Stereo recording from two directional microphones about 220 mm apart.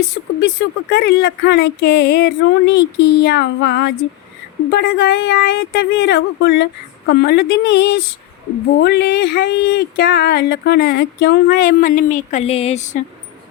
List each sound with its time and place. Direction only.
0.4 s speech: 50° left (ahead or behind); by 13.0 s 30° left (ahead or behind)